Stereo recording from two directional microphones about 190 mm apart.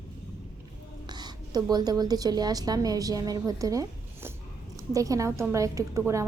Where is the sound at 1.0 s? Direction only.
20° right (ahead or behind).